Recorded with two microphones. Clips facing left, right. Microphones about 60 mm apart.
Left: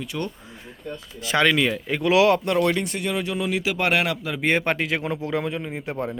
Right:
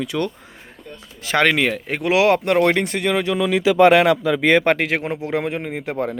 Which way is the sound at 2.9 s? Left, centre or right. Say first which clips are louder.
Right 6 dB; right.